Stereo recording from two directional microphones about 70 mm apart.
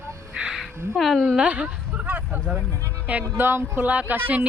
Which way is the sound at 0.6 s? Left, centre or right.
Centre.